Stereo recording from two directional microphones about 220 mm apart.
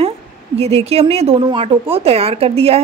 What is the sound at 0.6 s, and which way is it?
A woman's voice, 30° right (ahead or behind).